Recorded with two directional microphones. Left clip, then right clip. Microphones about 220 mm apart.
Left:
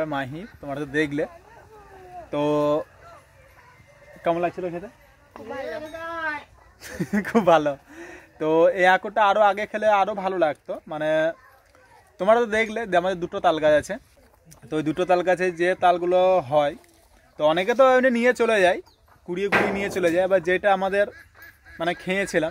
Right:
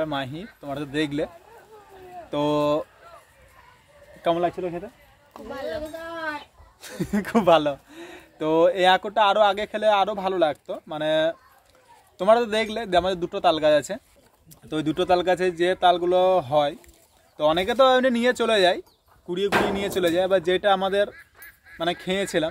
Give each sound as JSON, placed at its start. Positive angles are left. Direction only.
{"t": 0.0, "sound": "speech", "side_deg": 0}
{"t": 2.3, "sound": "speech", "side_deg": 0}
{"t": 4.2, "sound": "speech", "side_deg": -10}
{"t": 5.5, "sound": "speech", "side_deg": -20}
{"t": 5.9, "sound": "a sound", "side_deg": -45}
{"t": 6.8, "sound": "speech", "side_deg": 0}